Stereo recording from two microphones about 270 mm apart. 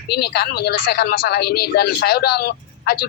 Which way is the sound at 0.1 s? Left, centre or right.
Left.